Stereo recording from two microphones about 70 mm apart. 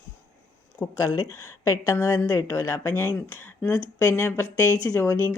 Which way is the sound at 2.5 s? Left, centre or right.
Left.